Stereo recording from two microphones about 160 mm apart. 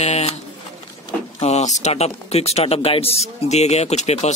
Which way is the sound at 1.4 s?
45° left (ahead or behind).